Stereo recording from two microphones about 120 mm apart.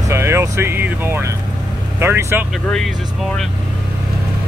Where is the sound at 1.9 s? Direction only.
20° right (ahead or behind).